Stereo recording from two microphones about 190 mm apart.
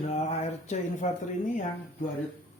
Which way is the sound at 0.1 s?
35° left (ahead or behind).